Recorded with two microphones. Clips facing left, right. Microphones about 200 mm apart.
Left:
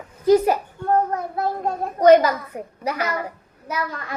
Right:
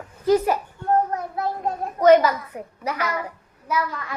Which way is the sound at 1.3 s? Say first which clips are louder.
Left 2 dB; 35° left (ahead or behind).